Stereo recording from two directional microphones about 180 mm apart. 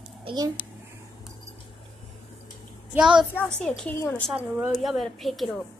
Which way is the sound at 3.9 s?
15° left (ahead or behind).